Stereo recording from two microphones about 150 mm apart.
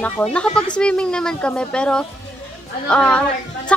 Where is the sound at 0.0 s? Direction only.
5° left (ahead or behind).